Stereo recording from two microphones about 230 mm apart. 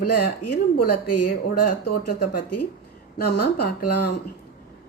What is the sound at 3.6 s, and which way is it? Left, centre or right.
Speech, left.